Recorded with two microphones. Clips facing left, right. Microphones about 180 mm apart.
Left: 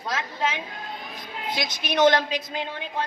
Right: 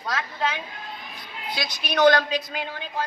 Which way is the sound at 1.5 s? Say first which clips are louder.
Left 1 dB; 20° left (ahead or behind).